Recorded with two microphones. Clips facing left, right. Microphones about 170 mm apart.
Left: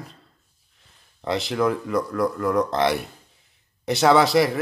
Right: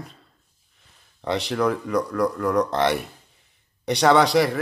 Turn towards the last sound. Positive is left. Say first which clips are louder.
# even
turn(degrees=0)  # may be behind; listen again after turning